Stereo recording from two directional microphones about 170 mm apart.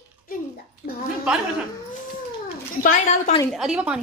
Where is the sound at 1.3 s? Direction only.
5° right (ahead or behind).